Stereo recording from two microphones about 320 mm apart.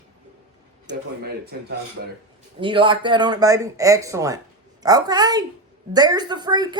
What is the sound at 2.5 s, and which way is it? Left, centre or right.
Speech, centre.